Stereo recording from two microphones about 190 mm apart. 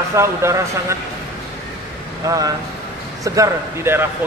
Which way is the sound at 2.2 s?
20° right (ahead or behind).